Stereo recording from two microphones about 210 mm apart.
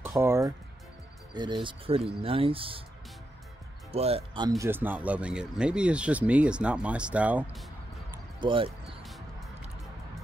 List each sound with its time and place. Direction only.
0.2 s speech: 10° right (ahead or behind)
3.9 s speech: 30° right (ahead or behind)
4.5 s speech: 10° right (ahead or behind)
8.4 s speech: 25° right (ahead or behind)